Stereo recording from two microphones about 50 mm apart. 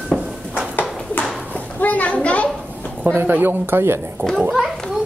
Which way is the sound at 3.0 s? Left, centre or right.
Right.